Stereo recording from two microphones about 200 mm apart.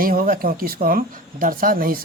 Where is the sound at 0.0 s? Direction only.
45° right (ahead or behind).